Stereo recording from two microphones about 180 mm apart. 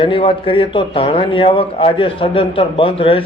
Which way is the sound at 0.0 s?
30° left (ahead or behind).